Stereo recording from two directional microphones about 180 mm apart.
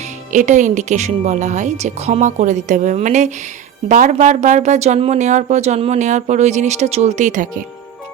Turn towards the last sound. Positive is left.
turn(degrees=-50)  # may be behind; listen again after turning